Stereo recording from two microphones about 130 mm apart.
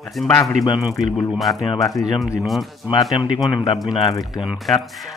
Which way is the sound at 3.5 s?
35° left (ahead or behind).